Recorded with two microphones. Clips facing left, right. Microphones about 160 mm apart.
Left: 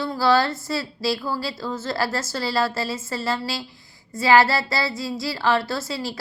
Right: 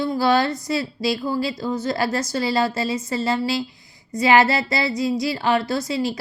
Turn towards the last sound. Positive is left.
turn(degrees=-20)  # may be behind; listen again after turning